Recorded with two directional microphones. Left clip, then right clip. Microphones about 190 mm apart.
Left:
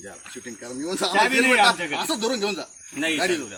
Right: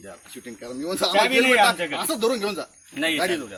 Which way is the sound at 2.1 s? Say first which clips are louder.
Right 3 dB; 25° right (ahead or behind).